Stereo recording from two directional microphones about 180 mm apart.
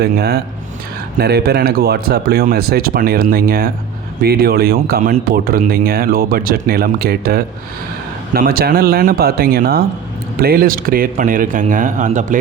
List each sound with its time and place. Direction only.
0.0 s speech: 60° right (ahead or behind); by 12.4 s 45° right (ahead or behind)